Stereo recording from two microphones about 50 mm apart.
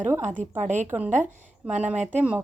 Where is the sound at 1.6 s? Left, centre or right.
Right.